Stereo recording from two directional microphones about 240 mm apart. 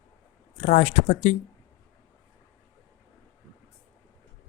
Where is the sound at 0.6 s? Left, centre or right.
Left.